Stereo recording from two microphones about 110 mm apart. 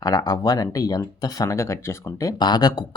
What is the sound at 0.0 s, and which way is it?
Speech, 35° left (ahead or behind).